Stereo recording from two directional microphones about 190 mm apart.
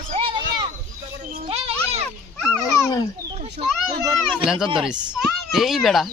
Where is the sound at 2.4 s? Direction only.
20° left (ahead or behind).